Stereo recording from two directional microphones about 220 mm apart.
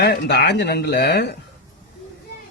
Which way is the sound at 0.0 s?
50° left (ahead or behind).